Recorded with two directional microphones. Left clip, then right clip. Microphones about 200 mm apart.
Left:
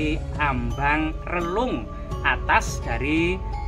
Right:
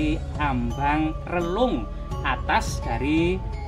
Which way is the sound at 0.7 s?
30° right (ahead or behind).